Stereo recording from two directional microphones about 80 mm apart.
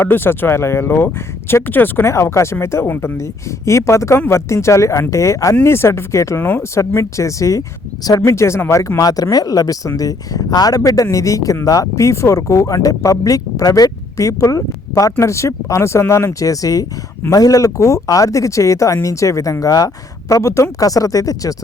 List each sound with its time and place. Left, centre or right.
0.0 s speech: left